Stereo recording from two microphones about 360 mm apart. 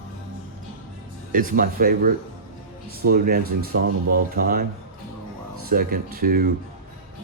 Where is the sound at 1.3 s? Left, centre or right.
Right.